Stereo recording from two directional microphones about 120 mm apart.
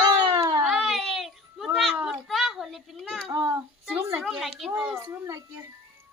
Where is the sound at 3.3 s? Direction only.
30° right (ahead or behind).